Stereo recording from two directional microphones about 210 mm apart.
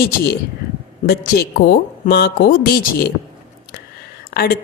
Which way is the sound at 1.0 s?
45° left (ahead or behind).